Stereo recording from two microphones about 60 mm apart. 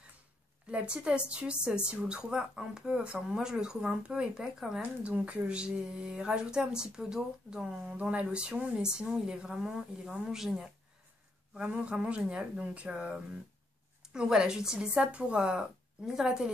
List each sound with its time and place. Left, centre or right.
0.7 s a woman's voice: centre
5.0 s a woman's voice: right
11.5 s a woman's voice: centre